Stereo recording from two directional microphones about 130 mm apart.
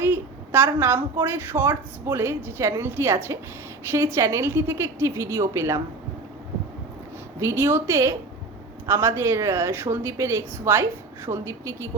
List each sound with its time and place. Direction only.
0.0 s a woman's voice: 15° right (ahead or behind)
7.3 s speech: 20° right (ahead or behind)